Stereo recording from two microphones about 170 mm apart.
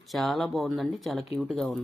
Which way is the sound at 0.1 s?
Centre (ahead or behind).